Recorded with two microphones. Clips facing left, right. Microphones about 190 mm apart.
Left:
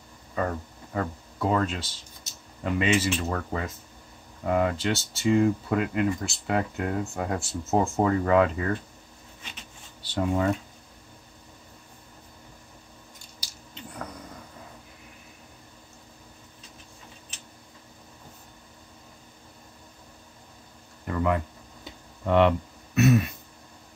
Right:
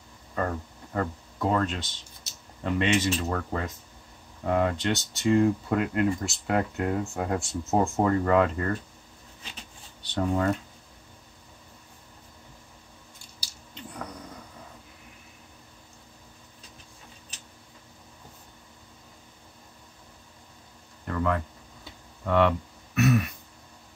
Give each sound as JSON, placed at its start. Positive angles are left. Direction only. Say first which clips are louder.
{"t": 0.4, "sound": "speech", "louder": "left 1 dB", "side_deg": 5}
{"t": 10.0, "sound": "speech", "louder": "left 1 dB", "side_deg": 5}
{"t": 21.1, "sound": "a sound", "louder": "left 2 dB", "side_deg": 15}
{"t": 22.2, "sound": "speech", "louder": "left 2 dB", "side_deg": 20}
{"t": 22.9, "sound": "throat clearing", "louder": "left 2 dB", "side_deg": 25}